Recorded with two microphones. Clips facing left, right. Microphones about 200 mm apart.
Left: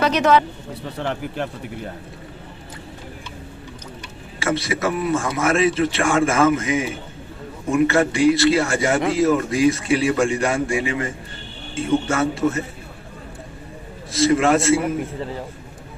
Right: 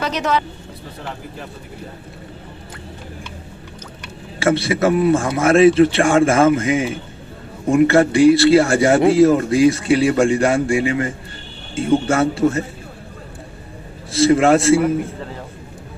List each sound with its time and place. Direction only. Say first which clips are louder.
0.0 s a man's voice: left 4 dB; 60° left (ahead or behind)
0.9 s speech: left 7 dB; 70° left (ahead or behind)
4.4 s speech: right 6 dB; 30° right (ahead or behind)
12.0 s speech: right 4 dB; 30° right (ahead or behind)
14.1 s speech: right 4 dB; 30° right (ahead or behind)